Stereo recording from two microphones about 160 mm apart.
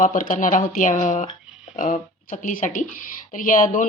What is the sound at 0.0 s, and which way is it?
Speech, 55° left (ahead or behind).